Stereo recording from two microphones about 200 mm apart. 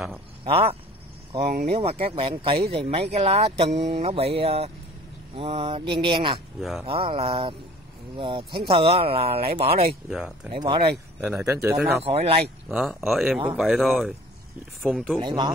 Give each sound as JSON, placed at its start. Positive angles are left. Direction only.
{"t": 0.5, "sound": "speech", "side_deg": -30}
{"t": 10.0, "sound": "speech", "side_deg": -5}
{"t": 10.5, "sound": "speech", "side_deg": -25}
{"t": 11.4, "sound": "speech", "side_deg": -15}
{"t": 12.0, "sound": "speech", "side_deg": -30}
{"t": 12.6, "sound": "speech", "side_deg": 0}
{"t": 15.1, "sound": "speech", "side_deg": -25}